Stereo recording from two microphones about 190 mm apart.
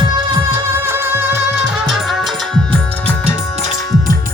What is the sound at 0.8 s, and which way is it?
Music, 10° right (ahead or behind).